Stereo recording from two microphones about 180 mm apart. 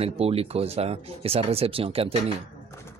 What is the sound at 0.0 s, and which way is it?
A man's voice, 35° right (ahead or behind).